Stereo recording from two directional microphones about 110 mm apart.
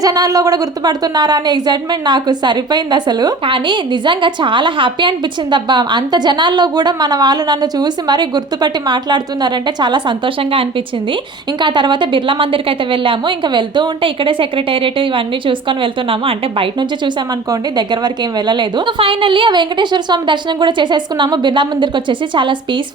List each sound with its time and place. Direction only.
0.0 s a woman's voice: 35° right (ahead or behind); by 16.6 s 55° right (ahead or behind)
17.5 s a woman's voice: 40° right (ahead or behind)